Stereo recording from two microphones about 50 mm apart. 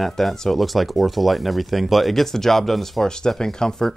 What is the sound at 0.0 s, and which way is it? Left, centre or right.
Speech, centre.